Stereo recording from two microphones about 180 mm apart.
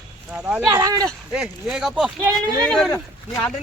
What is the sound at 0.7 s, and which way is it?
Speech, 20° right (ahead or behind).